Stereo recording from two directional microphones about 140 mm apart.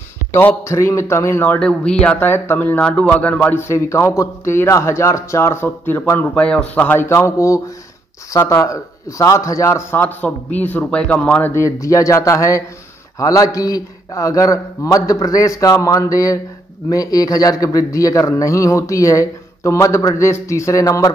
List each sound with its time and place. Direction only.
0.3 s a man's voice: 15° left (ahead or behind)